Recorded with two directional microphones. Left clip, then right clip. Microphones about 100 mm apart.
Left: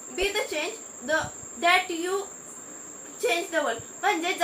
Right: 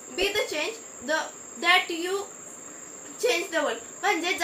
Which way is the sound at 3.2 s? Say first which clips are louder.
Right 1 dB; centre (ahead or behind).